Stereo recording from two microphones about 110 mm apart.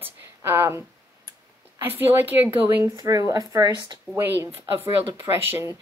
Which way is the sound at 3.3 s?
35° right (ahead or behind).